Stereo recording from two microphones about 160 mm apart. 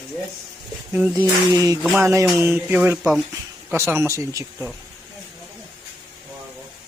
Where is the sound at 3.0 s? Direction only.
Centre (ahead or behind).